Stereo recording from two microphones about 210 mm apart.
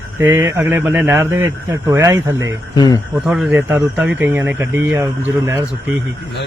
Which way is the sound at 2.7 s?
20° left (ahead or behind).